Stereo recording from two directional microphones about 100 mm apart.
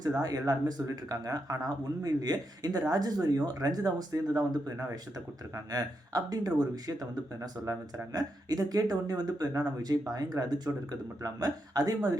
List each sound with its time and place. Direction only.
0.0 s speech: 35° right (ahead or behind)